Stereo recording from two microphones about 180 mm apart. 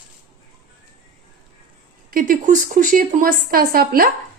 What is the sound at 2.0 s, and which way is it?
Speech, 50° right (ahead or behind).